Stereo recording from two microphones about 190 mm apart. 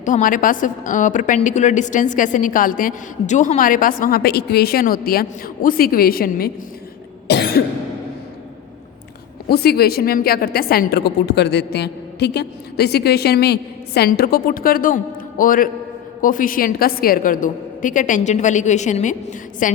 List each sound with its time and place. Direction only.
0.0 s a woman's voice: 45° left (ahead or behind)
7.3 s cough: 55° left (ahead or behind)
9.5 s a woman's voice: 55° left (ahead or behind)